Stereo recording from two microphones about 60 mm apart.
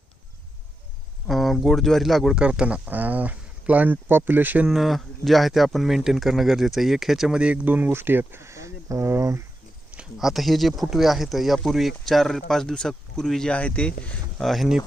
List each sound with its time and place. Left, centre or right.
1.3 s speech: centre
2.3 s speech: centre; by 4.6 s right
4.7 s speech: centre
7.3 s speech: right
10.2 s speech: centre
13.5 s speech: left
14.3 s speech: centre